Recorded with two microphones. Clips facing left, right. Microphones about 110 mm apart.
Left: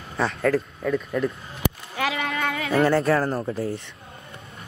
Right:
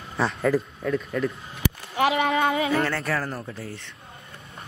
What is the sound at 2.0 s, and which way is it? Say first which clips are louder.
Speech: right 8 dB; 30° right (ahead or behind).